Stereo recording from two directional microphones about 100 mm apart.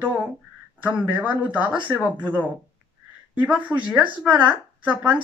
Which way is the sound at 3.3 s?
15° right (ahead or behind).